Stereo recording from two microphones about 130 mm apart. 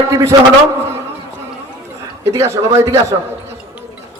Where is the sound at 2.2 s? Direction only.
20° right (ahead or behind).